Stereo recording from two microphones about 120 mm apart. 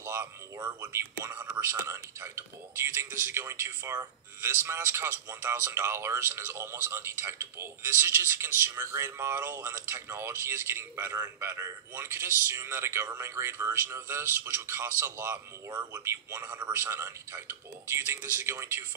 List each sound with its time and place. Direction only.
0.0 s speech: 20° right (ahead or behind)